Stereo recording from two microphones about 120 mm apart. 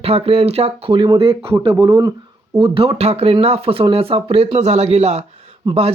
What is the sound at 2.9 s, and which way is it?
Speech, 60° right (ahead or behind).